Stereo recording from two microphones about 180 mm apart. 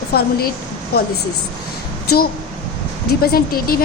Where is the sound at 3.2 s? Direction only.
55° left (ahead or behind).